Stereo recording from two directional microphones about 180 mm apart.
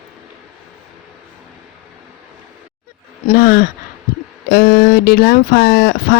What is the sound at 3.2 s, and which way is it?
Speech, 50° left (ahead or behind).